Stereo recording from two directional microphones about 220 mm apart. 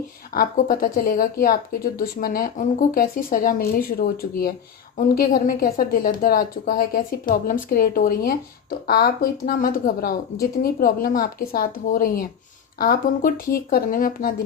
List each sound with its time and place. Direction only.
0.3 s speech: 40° left (ahead or behind)